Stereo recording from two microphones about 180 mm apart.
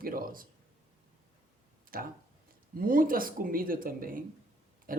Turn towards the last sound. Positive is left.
turn(degrees=-50)  # may be behind; listen again after turning